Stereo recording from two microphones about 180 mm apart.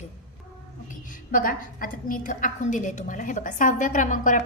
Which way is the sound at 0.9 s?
50° left (ahead or behind).